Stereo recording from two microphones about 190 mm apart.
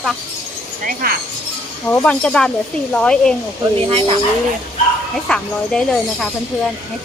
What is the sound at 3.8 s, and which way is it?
Speech, 30° right (ahead or behind).